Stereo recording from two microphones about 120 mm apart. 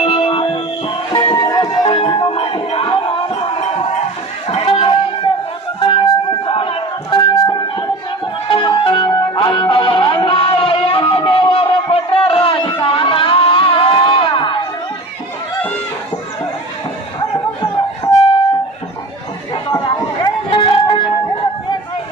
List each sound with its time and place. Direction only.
0.0 s music: 50° left (ahead or behind)
1.4 s music: 30° left (ahead or behind)
1.8 s music: 50° left (ahead or behind)
4.4 s a sound: 50° left (ahead or behind)
5.8 s music: 45° left (ahead or behind)
9.0 s music: 30° left (ahead or behind)
9.4 s music: 40° left (ahead or behind)
17.6 s music: 45° left (ahead or behind)
20.2 s music: 45° left (ahead or behind)